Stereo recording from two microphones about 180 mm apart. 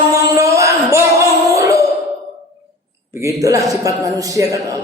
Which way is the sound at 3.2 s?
20° right (ahead or behind).